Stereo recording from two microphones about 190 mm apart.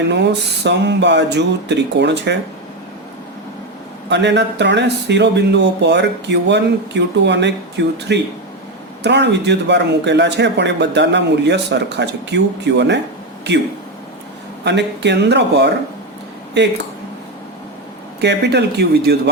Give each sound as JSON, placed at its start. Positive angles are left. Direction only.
{"t": 0.1, "sound": "speech", "side_deg": -65}
{"t": 4.1, "sound": "speech", "side_deg": -65}
{"t": 14.6, "sound": "speech", "side_deg": -65}
{"t": 18.2, "sound": "speech", "side_deg": -65}